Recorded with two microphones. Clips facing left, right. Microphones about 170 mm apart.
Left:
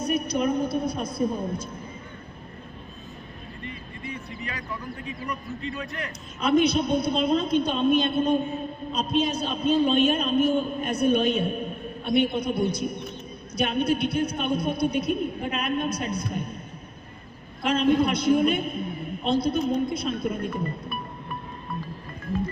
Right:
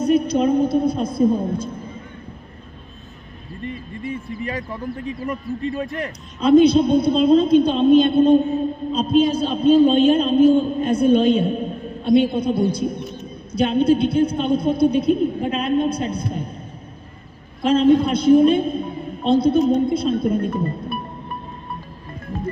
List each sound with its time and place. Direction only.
0.0 s a woman's voice: 25° right (ahead or behind)
4.1 s speech: 45° right (ahead or behind)
6.4 s a man's voice: 30° right (ahead or behind)
17.6 s a man's voice: 30° right (ahead or behind)